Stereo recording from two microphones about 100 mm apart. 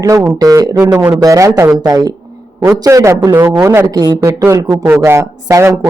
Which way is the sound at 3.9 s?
40° right (ahead or behind).